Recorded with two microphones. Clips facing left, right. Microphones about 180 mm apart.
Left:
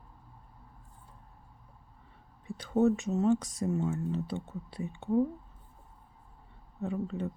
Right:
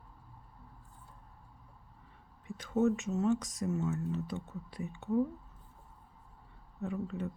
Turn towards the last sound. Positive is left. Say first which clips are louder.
# left 3 dB
turn(degrees=30)  # may be behind; listen again after turning